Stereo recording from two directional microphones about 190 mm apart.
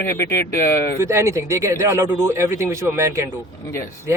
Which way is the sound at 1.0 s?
15° right (ahead or behind).